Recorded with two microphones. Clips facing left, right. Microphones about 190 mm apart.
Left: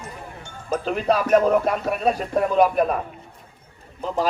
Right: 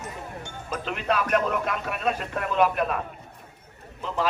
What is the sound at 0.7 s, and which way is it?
Speech, 40° left (ahead or behind).